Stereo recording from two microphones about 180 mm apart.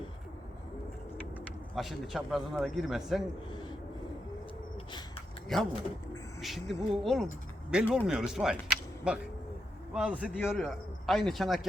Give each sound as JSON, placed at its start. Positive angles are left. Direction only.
{"t": 1.7, "sound": "a man's voice", "side_deg": 0}
{"t": 3.5, "sound": "a sound", "side_deg": 25}
{"t": 5.5, "sound": "a man's voice", "side_deg": 0}